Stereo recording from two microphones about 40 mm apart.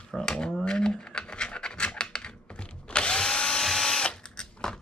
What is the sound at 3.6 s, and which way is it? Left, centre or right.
Drill, centre.